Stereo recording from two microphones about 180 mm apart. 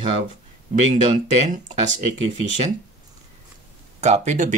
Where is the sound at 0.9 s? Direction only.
45° right (ahead or behind).